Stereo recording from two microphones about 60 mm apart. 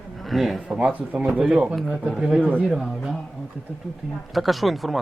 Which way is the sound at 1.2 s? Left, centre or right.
Centre.